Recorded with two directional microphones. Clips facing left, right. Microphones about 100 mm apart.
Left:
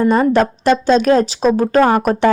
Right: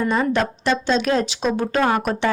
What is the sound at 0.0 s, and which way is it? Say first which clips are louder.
Speech: left 7 dB; 40° left (ahead or behind).